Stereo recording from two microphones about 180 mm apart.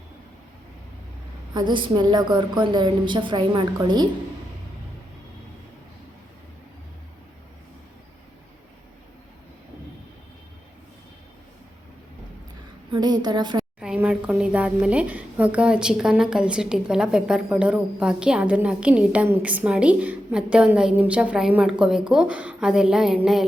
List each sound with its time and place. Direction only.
1.5 s a woman's voice: 25° right (ahead or behind)
12.9 s a woman's voice: 25° right (ahead or behind)
13.7 s a woman's voice: 5° right (ahead or behind)